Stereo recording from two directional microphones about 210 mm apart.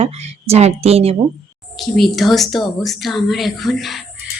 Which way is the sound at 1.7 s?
Centre (ahead or behind).